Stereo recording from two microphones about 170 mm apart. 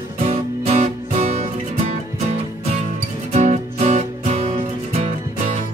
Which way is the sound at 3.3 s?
45° right (ahead or behind).